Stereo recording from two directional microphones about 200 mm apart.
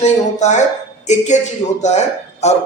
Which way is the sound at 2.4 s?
35° left (ahead or behind).